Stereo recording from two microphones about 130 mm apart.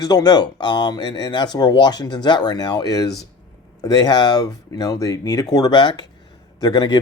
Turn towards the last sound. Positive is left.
turn(degrees=35)  # may be behind; listen again after turning